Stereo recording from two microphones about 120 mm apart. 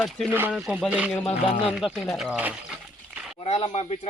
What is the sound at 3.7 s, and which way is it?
Speech, 65° left (ahead or behind).